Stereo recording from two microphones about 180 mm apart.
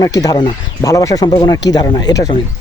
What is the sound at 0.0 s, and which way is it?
Speech, 20° left (ahead or behind).